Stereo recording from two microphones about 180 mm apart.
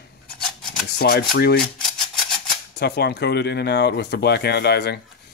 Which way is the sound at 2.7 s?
65° left (ahead or behind).